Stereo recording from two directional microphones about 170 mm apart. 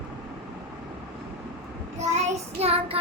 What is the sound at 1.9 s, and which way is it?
Child singing, 40° right (ahead or behind).